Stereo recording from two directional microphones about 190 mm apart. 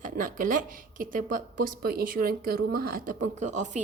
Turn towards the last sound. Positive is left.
turn(degrees=-40)  # may be behind; listen again after turning